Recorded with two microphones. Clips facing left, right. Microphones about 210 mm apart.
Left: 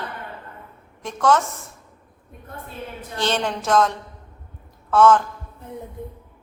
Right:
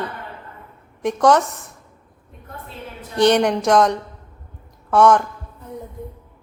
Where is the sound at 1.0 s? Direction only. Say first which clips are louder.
Right 4 dB; 15° right (ahead or behind).